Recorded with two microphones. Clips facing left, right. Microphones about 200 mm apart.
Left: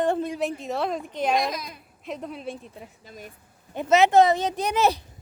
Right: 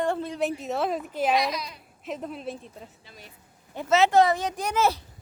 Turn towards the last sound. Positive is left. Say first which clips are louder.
# left 2 dB
turn(degrees=20)  # may be behind; listen again after turning